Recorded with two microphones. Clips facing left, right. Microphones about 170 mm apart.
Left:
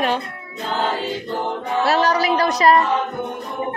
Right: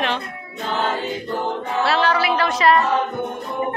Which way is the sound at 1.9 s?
40° left (ahead or behind).